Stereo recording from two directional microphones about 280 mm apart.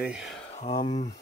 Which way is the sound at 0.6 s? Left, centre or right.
Centre.